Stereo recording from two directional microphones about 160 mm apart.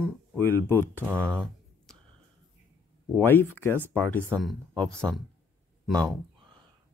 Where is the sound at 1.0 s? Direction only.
15° right (ahead or behind).